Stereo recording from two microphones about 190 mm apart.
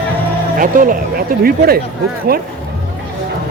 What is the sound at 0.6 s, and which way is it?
Speech, 45° right (ahead or behind).